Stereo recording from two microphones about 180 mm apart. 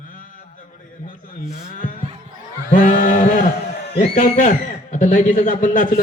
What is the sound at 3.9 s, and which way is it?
A man's voice, 45° left (ahead or behind).